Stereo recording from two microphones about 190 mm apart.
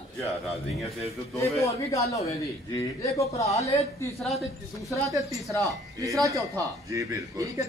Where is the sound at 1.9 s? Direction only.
15° left (ahead or behind).